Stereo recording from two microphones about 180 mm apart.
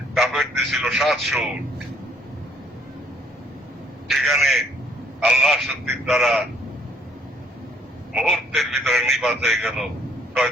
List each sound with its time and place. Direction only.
0.1 s a man's voice: centre (ahead or behind)
4.1 s speech: centre (ahead or behind)
8.1 s speech: centre (ahead or behind)